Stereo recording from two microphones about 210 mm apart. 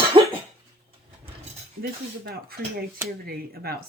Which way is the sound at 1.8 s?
50° right (ahead or behind).